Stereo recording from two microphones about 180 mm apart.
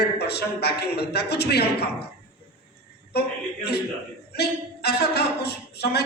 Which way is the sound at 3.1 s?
65° left (ahead or behind).